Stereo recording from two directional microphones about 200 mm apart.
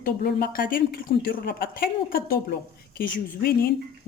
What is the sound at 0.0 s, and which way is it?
Speech, 50° left (ahead or behind).